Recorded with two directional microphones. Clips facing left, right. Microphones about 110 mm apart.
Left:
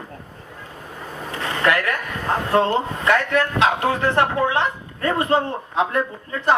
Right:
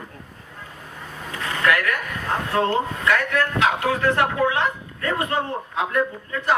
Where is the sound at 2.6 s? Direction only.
25° left (ahead or behind).